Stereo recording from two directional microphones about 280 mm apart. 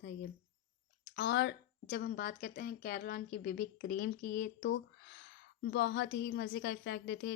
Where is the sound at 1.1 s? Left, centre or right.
Left.